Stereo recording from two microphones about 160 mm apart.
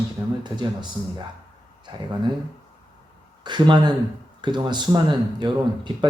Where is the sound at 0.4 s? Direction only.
25° right (ahead or behind).